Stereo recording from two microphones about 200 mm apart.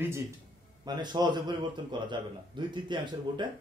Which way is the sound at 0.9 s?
20° right (ahead or behind).